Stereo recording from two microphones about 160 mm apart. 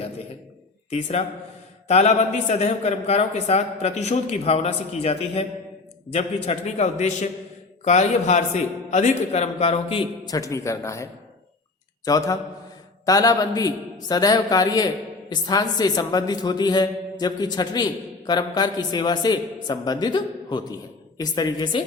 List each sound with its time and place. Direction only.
0.9 s a man's voice: 40° left (ahead or behind)
10.2 s a man's voice: 20° left (ahead or behind)